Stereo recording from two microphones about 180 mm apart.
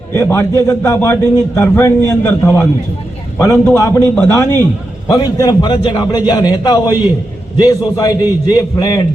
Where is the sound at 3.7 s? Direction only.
20° left (ahead or behind).